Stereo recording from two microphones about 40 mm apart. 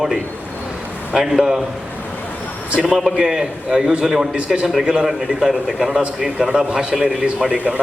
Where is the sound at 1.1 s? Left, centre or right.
Centre.